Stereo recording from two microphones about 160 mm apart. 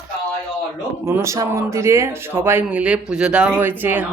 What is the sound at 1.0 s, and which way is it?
Speech, 15° right (ahead or behind).